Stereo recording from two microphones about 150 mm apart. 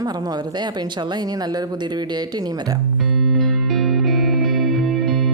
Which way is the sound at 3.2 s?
Centre (ahead or behind).